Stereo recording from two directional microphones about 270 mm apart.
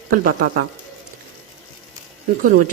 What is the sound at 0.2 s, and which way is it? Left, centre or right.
Speech, right.